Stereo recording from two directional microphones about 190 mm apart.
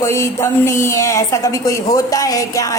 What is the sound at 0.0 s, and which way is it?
A woman's voice, 15° left (ahead or behind).